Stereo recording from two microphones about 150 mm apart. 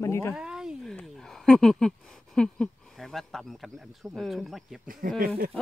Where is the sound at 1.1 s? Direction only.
5° left (ahead or behind).